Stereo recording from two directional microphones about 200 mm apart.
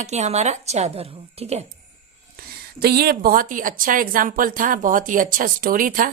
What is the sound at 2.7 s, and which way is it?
A woman's voice, 50° right (ahead or behind).